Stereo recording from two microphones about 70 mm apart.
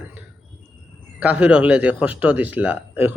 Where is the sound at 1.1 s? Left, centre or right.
Centre.